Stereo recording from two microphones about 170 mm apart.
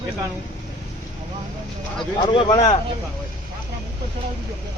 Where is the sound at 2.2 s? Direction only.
30° left (ahead or behind).